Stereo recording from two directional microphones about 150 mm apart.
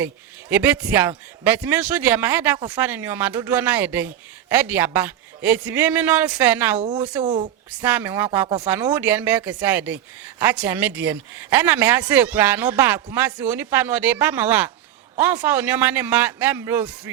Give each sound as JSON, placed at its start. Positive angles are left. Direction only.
{"t": 0.5, "sound": "a woman's voice", "side_deg": -10}
{"t": 7.2, "sound": "speech", "side_deg": -30}
{"t": 7.9, "sound": "a woman's voice", "side_deg": -10}